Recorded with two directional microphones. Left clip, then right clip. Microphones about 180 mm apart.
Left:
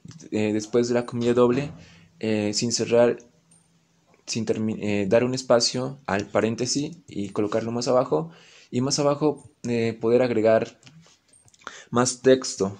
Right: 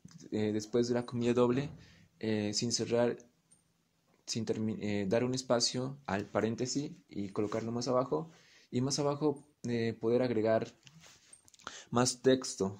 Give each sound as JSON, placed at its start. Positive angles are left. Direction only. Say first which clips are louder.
{"t": 0.1, "sound": "speech", "louder": "left 9 dB", "side_deg": -15}
{"t": 4.3, "sound": "speech", "louder": "left 9 dB", "side_deg": -15}